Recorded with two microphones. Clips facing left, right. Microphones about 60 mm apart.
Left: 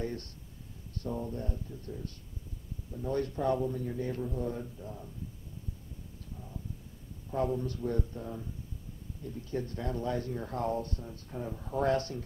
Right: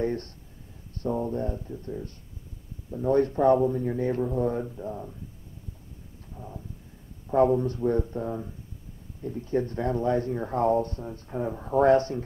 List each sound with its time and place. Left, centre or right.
0.0 s speech: right
6.3 s a sound: right
7.2 s speech: right